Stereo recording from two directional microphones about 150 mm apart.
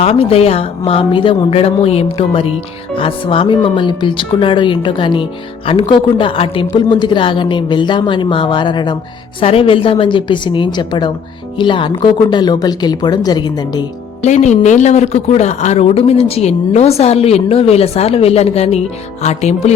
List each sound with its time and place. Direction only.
0.0 s speech: 40° left (ahead or behind)
14.2 s speech: 50° left (ahead or behind)